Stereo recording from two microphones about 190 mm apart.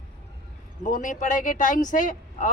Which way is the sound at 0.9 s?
45° left (ahead or behind).